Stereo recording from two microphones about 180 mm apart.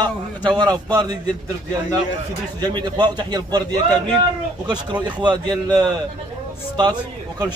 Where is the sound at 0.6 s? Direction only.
20° right (ahead or behind).